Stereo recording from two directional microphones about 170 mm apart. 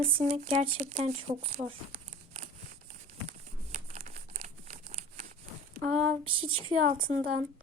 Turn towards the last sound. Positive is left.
turn(degrees=-55)  # may be behind; listen again after turning